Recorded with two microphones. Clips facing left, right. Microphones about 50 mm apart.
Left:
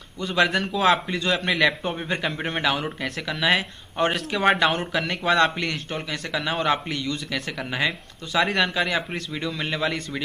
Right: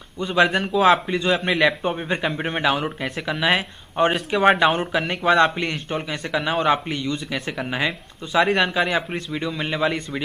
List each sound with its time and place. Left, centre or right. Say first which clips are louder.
0.2 s speech: right 3 dB; centre
3.4 s speech: even; centre
5.6 s a man's voice: right 2 dB; right
6.3 s speech: right 4 dB; centre
6.9 s a man's voice: right 2 dB; right